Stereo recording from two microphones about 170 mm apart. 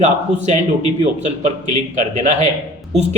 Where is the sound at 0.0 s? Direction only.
45° right (ahead or behind).